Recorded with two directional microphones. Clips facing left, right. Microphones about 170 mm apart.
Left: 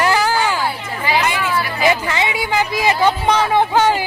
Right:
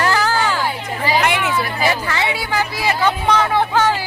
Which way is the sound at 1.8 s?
15° left (ahead or behind).